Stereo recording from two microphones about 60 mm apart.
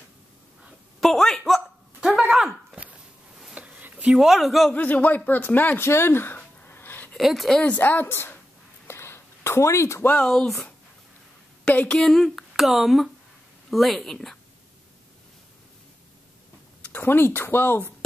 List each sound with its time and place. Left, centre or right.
1.0 s speech: centre
2.0 s a sound: centre
4.2 s speech: centre
4.7 s speech: left
5.9 s a sound: left
7.2 s speech: centre
7.7 s speech: left
8.8 s a sound: left
10.1 s speech: centre
11.6 s speech: left
12.0 s speech: centre
16.8 s speech: left